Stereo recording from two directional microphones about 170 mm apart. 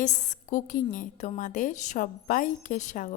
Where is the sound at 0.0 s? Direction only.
45° left (ahead or behind).